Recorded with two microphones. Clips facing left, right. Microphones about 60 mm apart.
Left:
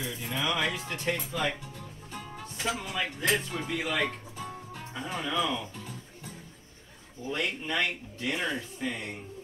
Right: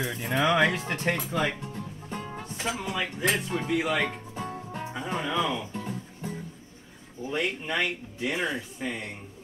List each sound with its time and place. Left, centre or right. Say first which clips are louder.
0.0 s speech: right 6 dB; right
0.5 s speech: right 7 dB; right
1.7 s music: right 6 dB; right
2.6 s speech: right 1 dB; centre
4.4 s music: right 5 dB; right
4.8 s music: right 2 dB; centre
5.2 s speech: right 1 dB; centre
7.2 s speech: right 2 dB; centre